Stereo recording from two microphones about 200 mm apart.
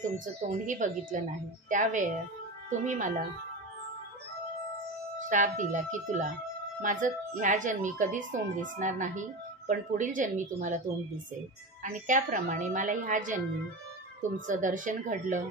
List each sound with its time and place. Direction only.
0.0 s speech: 40° right (ahead or behind)
5.2 s speech: 40° right (ahead or behind)
11.9 s speech: 40° right (ahead or behind)